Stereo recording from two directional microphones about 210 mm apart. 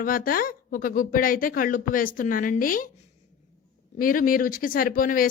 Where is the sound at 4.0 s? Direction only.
40° left (ahead or behind).